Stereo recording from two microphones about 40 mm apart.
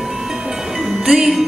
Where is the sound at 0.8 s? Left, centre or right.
Centre.